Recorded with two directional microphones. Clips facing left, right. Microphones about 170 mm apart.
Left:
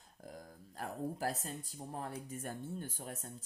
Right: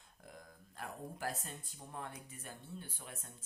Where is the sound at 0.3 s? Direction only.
40° left (ahead or behind).